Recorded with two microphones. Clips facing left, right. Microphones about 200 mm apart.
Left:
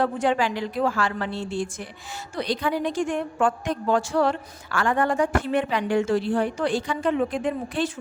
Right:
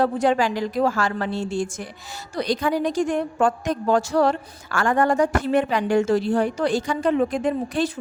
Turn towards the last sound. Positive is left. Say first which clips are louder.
# right 3 dB
turn(degrees=-40)  # may be behind; listen again after turning